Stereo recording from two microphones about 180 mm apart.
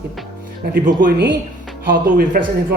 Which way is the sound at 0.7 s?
55° right (ahead or behind).